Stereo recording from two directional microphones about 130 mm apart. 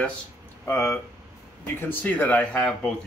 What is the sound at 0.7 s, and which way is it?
A man's voice, 20° left (ahead or behind).